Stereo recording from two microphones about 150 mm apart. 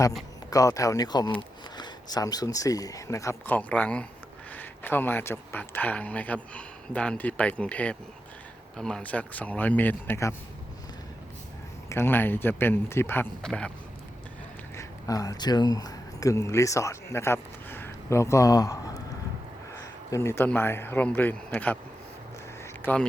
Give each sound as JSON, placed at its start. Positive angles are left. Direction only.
{"t": 0.5, "sound": "speech", "side_deg": 20}
{"t": 11.9, "sound": "speech", "side_deg": 15}
{"t": 13.4, "sound": "speech", "side_deg": 5}
{"t": 14.8, "sound": "speech", "side_deg": 20}
{"t": 20.1, "sound": "speech", "side_deg": 20}
{"t": 22.6, "sound": "a sound", "side_deg": 10}